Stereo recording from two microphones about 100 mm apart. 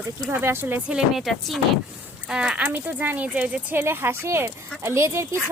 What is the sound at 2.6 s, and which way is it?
Speech, 20° right (ahead or behind).